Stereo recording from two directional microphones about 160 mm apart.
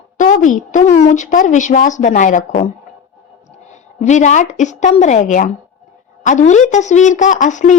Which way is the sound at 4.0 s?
50° left (ahead or behind).